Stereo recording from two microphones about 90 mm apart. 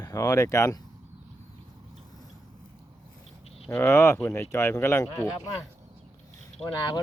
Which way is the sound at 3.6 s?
30° left (ahead or behind).